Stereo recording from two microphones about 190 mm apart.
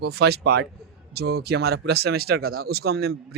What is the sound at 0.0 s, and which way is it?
A man's voice, 60° right (ahead or behind).